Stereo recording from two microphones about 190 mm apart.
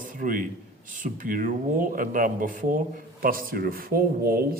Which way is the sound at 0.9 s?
45° right (ahead or behind).